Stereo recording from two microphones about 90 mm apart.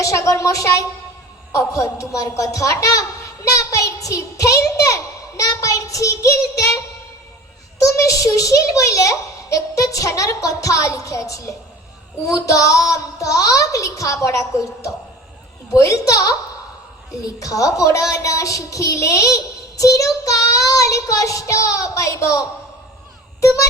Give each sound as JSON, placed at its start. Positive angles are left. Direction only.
{"t": 0.0, "sound": "a child's voice", "side_deg": 35}
{"t": 7.8, "sound": "a child's voice", "side_deg": 35}